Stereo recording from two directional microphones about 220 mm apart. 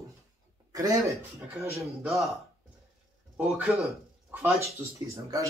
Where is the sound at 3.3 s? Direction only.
5° right (ahead or behind).